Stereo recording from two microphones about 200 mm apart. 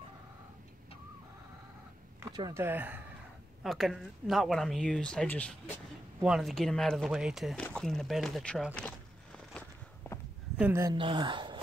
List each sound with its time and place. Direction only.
2.2 s speech: 15° right (ahead or behind); by 9.6 s 5° left (ahead or behind)
10.6 s speech: 15° right (ahead or behind)